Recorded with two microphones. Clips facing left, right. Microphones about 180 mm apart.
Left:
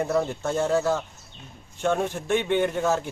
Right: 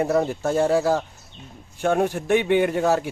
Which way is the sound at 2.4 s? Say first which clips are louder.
Right 4 dB; 10° right (ahead or behind).